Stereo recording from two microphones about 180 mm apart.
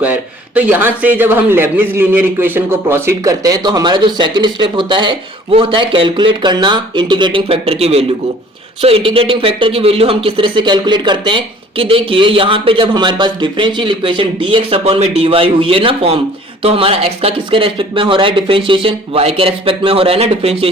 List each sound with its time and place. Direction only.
0.0 s a man's voice: 10° right (ahead or behind); by 20.7 s 35° right (ahead or behind)